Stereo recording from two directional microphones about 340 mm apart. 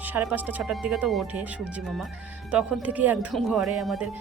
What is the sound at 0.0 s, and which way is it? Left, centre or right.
Speech, centre.